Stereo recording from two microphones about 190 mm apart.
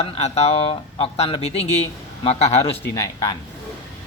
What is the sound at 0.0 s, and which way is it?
Speech, 35° left (ahead or behind).